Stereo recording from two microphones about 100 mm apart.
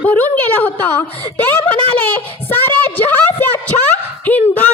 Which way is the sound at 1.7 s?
20° left (ahead or behind).